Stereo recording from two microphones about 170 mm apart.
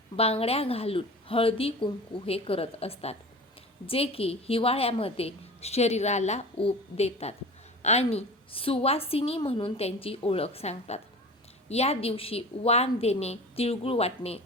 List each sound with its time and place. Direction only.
0.2 s a woman's voice: 35° left (ahead or behind)